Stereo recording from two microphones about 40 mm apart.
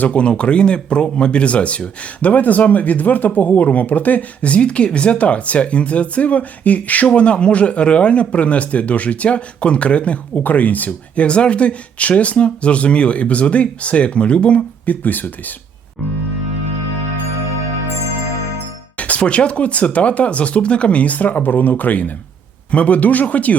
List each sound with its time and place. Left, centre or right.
0.0 s speech: left
7.1 s speech: left
14.8 s speech: left
18.9 s music: left
19.2 s speech: left